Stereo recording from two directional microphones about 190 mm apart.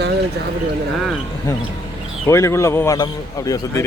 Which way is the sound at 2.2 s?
15° left (ahead or behind).